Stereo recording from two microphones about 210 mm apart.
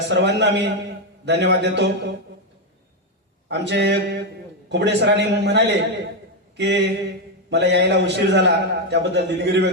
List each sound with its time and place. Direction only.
0.1 s a man's voice: 55° right (ahead or behind)
3.5 s a man's voice: 55° right (ahead or behind)